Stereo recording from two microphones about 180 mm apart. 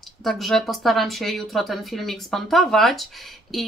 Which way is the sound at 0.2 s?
Centre (ahead or behind).